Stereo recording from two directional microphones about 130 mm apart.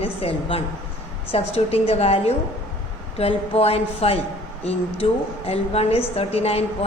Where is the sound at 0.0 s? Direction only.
45° left (ahead or behind).